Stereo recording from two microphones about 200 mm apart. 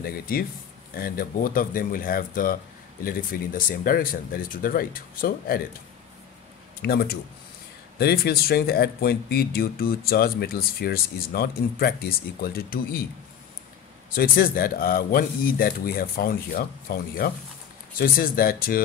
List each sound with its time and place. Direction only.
0.0 s speech: 50° left (ahead or behind)
6.8 s speech: 50° left (ahead or behind)
14.1 s speech: 45° left (ahead or behind)